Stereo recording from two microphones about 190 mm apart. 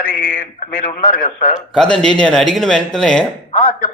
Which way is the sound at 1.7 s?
5° left (ahead or behind).